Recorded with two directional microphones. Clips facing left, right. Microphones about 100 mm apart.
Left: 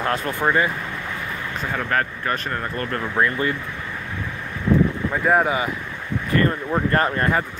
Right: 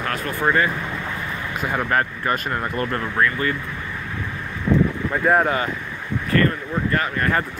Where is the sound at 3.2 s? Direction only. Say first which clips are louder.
Left 1 dB; 20° left (ahead or behind).